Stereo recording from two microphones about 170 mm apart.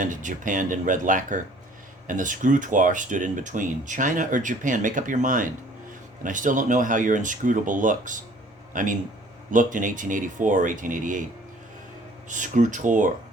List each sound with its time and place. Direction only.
0.0 s a man's voice: 50° right (ahead or behind)
12.3 s speech: 45° right (ahead or behind)